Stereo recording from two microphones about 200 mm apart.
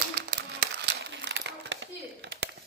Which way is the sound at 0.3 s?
50° right (ahead or behind).